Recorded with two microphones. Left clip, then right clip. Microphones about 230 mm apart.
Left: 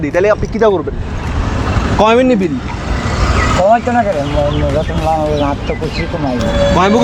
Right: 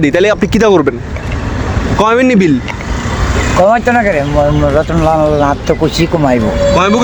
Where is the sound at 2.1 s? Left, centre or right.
Right.